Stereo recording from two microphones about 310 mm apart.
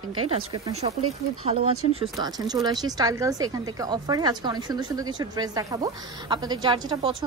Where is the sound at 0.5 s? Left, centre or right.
Centre.